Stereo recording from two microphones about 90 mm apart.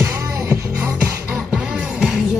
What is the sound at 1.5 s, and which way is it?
Music, 5° right (ahead or behind).